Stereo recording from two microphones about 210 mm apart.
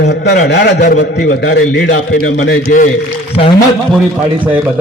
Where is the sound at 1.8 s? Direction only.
40° left (ahead or behind).